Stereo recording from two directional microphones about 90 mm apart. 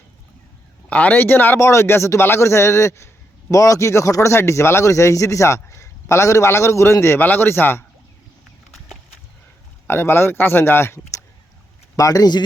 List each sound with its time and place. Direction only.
0.9 s a man's voice: 20° left (ahead or behind)
9.8 s a man's voice: 25° left (ahead or behind)
11.9 s a man's voice: 45° left (ahead or behind)